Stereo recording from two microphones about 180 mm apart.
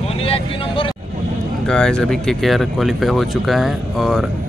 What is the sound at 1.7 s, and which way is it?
Speech, 5° left (ahead or behind).